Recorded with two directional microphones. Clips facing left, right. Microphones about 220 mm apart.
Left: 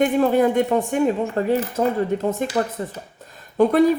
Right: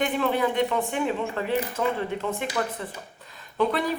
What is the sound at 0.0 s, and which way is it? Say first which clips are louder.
Speech: left 7 dB; 45° left (ahead or behind).